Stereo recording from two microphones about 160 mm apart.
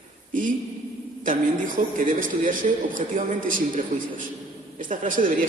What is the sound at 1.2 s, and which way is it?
A man's voice, 55° right (ahead or behind).